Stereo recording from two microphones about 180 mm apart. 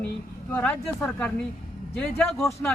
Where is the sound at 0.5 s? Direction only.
10° left (ahead or behind).